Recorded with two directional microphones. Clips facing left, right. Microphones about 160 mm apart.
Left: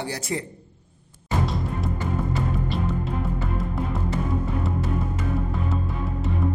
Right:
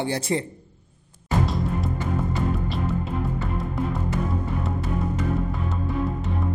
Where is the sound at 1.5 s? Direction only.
Centre (ahead or behind).